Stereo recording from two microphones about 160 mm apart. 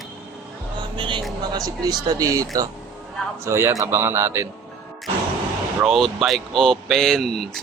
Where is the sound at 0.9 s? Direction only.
30° right (ahead or behind); by 4.4 s 15° right (ahead or behind).